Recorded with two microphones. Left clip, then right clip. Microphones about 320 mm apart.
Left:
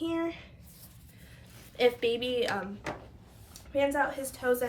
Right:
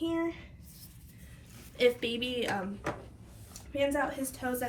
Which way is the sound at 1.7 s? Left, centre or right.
Left.